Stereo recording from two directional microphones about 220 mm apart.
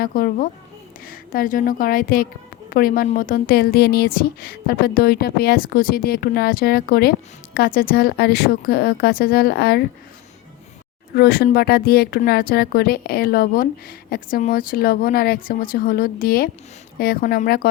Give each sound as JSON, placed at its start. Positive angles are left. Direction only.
{"t": 0.0, "sound": "a woman's voice", "side_deg": 40}
{"t": 11.1, "sound": "a woman's voice", "side_deg": 45}